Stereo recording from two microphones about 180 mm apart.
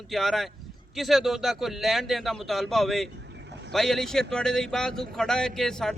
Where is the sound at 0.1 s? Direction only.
Centre (ahead or behind).